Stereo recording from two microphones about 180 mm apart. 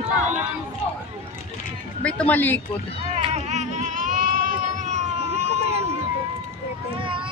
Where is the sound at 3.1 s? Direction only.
30° right (ahead or behind).